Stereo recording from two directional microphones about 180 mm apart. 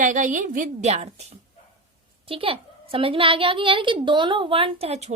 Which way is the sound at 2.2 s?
30° right (ahead or behind).